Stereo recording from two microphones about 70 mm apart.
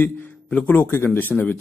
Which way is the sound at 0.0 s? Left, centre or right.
Left.